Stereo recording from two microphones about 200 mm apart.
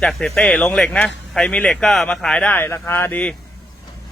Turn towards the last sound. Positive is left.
turn(degrees=5)  # may be behind; listen again after turning